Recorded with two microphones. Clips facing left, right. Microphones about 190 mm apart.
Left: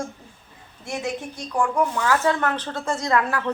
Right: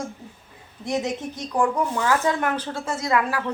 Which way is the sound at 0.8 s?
20° right (ahead or behind).